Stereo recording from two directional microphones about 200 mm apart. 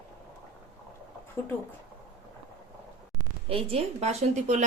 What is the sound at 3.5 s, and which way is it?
A woman's voice, 30° right (ahead or behind).